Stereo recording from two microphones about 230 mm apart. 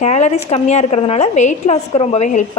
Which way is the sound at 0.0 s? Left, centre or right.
Left.